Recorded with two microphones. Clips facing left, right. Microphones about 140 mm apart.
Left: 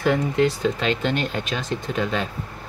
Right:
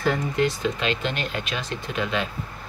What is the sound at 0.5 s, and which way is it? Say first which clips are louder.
Speech: left 3 dB; 35° left (ahead or behind).